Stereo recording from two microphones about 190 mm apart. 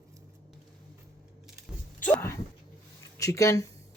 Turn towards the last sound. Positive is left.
turn(degrees=15)  # may be behind; listen again after turning